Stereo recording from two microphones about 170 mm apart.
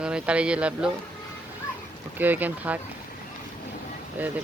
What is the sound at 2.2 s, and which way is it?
Speech, 10° right (ahead or behind).